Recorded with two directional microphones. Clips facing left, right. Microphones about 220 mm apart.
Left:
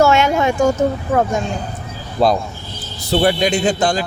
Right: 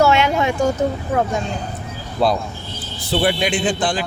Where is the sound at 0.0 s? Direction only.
45° left (ahead or behind).